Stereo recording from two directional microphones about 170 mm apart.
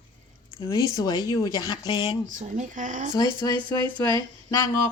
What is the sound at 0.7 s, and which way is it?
Speech, 20° left (ahead or behind).